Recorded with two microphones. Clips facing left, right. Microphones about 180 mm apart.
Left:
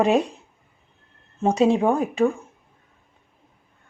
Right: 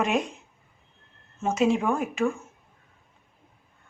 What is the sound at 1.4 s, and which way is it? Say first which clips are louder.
Speech: left 5 dB; 35° left (ahead or behind).